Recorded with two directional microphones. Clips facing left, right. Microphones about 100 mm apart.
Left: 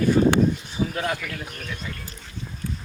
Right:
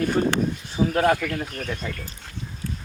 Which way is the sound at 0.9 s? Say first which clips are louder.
Right 11 dB; 50° right (ahead or behind).